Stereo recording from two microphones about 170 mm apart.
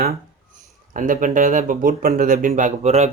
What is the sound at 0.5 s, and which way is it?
Speech, 50° right (ahead or behind).